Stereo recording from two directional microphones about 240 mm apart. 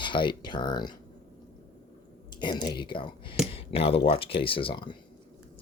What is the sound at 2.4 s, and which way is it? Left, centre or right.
Speech, centre.